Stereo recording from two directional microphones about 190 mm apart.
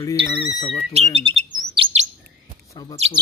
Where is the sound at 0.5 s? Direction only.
30° left (ahead or behind).